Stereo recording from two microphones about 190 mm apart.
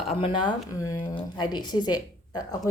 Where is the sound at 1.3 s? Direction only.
20° left (ahead or behind).